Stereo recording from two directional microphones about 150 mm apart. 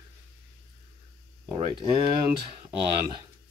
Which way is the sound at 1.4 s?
35° right (ahead or behind).